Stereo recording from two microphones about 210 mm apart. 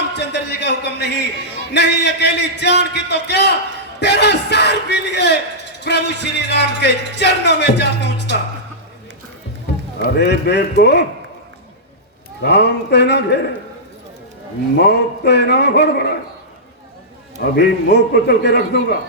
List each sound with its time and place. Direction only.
0.2 s speech: 55° left (ahead or behind)
10.0 s speech: 50° left (ahead or behind)
12.4 s speech: 55° left (ahead or behind)
14.8 s speech: 55° left (ahead or behind)
17.4 s speech: 50° left (ahead or behind)